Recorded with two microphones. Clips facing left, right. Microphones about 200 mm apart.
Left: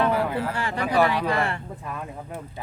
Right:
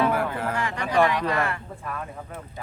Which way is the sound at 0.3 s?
35° left (ahead or behind).